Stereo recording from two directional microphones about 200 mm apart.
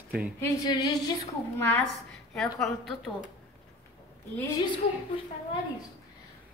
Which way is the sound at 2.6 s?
Centre (ahead or behind).